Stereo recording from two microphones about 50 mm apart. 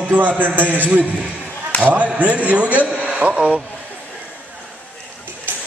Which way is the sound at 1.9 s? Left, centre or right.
Right.